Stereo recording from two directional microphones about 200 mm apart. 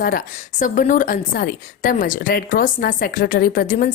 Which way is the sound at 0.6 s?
40° left (ahead or behind).